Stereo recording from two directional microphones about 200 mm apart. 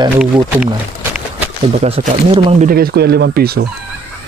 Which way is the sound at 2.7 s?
50° right (ahead or behind).